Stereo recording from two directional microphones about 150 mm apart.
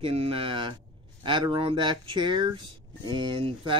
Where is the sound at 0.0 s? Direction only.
40° right (ahead or behind).